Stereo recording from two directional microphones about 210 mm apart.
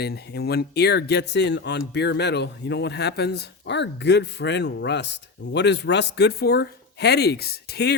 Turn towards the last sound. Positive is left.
turn(degrees=50)  # may be behind; listen again after turning